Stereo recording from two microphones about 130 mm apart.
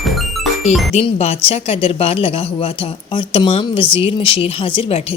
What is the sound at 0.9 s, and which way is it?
A woman's voice, 50° left (ahead or behind).